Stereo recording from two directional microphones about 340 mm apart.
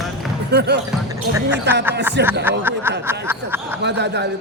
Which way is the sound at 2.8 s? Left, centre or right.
Centre.